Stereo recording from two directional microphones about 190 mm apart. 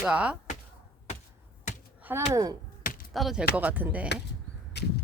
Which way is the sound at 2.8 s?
45° left (ahead or behind).